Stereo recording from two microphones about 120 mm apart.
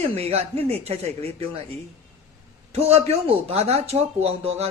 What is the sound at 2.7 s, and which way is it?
Speech, 60° right (ahead or behind).